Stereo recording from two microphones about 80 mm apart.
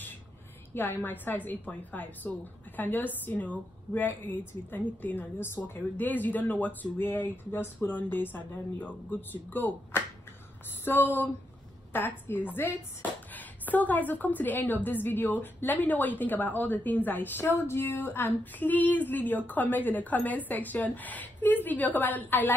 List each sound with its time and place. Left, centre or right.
0.7 s a woman's voice: left